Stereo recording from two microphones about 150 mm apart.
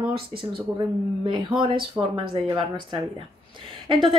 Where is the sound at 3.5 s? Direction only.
35° right (ahead or behind).